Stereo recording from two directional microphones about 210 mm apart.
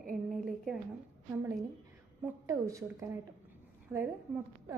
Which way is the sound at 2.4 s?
15° right (ahead or behind).